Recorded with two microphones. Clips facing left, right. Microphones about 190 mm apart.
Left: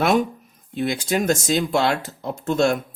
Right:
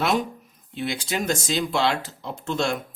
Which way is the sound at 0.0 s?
50° left (ahead or behind).